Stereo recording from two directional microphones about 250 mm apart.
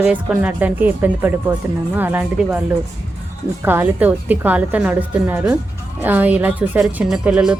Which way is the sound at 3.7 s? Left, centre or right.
Centre.